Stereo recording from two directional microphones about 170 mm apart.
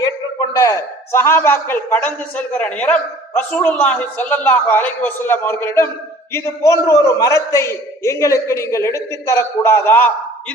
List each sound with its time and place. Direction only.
0.0 s a man's voice: 20° left (ahead or behind)